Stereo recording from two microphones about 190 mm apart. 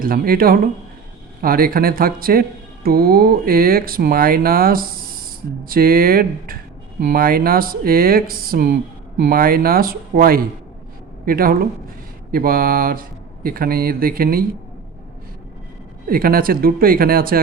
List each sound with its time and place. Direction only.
0.0 s speech: 50° right (ahead or behind)
16.0 s speech: 50° right (ahead or behind)